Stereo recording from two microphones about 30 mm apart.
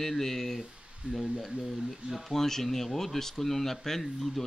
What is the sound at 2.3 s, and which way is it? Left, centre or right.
Speech, centre.